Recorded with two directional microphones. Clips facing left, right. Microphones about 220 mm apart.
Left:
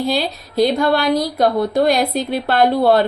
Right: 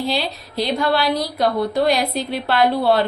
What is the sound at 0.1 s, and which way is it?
A woman's voice, 45° left (ahead or behind).